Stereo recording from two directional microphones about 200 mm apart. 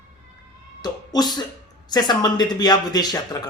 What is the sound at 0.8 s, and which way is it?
Speech, 20° left (ahead or behind).